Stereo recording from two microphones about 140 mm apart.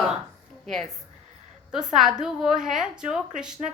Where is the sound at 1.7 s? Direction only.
5° right (ahead or behind).